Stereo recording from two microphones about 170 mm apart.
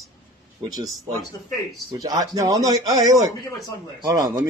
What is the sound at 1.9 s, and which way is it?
Speech, 20° right (ahead or behind).